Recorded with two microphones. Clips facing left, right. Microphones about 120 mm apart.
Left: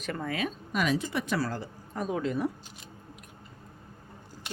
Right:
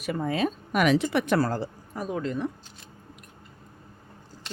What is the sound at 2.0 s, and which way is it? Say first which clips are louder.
Speech: even; centre (ahead or behind).